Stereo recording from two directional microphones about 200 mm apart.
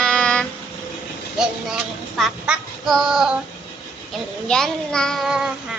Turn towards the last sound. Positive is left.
turn(degrees=0)  # may be behind; listen again after turning